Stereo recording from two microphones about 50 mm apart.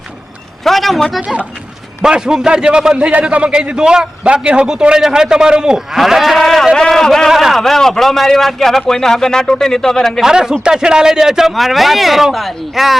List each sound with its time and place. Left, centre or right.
0.6 s a man's voice: centre
2.0 s a man's voice: centre
3.1 s a man's voice: right; by 7.3 s centre
7.3 s a man's voice: centre
7.5 s speech: centre
10.2 s a man's voice: centre